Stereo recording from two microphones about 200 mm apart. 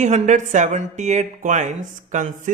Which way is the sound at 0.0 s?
35° right (ahead or behind).